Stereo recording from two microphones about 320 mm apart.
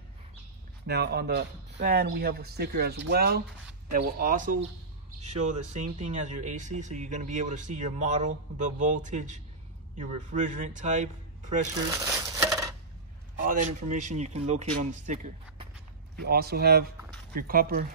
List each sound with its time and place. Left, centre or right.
0.8 s speech: right
12.4 s coin: centre
13.4 s a sound: right
13.9 s speech: right
16.2 s speech: right